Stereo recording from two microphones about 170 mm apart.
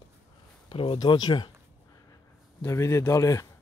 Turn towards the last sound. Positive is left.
turn(degrees=20)  # may be behind; listen again after turning